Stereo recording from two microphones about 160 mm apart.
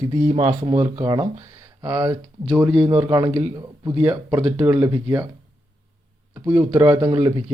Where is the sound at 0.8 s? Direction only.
20° right (ahead or behind).